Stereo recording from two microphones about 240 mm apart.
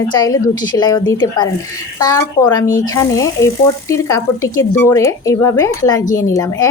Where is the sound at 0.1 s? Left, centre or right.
Centre.